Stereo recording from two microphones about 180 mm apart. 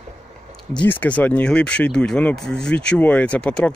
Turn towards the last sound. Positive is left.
turn(degrees=5)  # may be behind; listen again after turning